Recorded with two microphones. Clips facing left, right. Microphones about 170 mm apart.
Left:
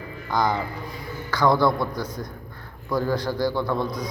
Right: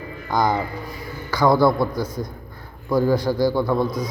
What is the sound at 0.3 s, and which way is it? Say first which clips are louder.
A man's voice: right 3 dB; 10° right (ahead or behind).